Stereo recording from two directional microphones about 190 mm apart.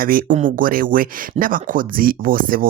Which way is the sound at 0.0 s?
50° right (ahead or behind).